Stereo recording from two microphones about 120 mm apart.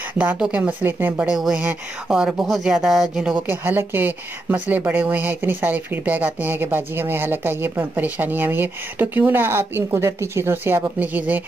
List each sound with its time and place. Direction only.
0.2 s speech: 10° right (ahead or behind)
1.2 s speech: 5° right (ahead or behind)